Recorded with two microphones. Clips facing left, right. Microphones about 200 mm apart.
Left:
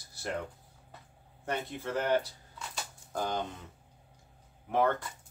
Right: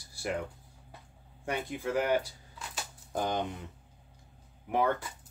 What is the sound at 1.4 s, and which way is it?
Speech, 10° right (ahead or behind).